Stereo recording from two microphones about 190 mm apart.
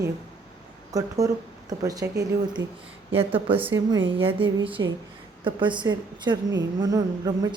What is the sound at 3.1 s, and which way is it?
A woman's voice, 30° right (ahead or behind).